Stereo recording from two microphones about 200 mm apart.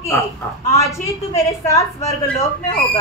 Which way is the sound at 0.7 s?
15° left (ahead or behind).